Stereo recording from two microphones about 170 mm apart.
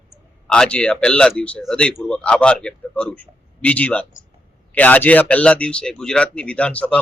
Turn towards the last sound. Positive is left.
turn(degrees=5)  # may be behind; listen again after turning